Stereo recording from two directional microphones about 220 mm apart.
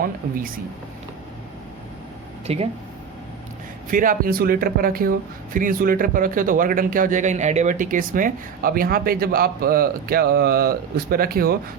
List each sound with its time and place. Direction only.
0.0 s speech: 40° right (ahead or behind)
2.5 s speech: 30° right (ahead or behind)
3.8 s speech: 40° right (ahead or behind)